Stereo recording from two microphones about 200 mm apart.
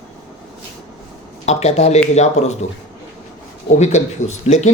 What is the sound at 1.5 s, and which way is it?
Speech, 35° left (ahead or behind).